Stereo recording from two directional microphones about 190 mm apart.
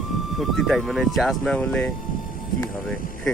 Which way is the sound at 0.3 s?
Centre (ahead or behind).